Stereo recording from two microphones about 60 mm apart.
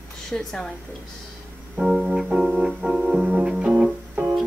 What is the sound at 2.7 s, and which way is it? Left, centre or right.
Keyboard, centre.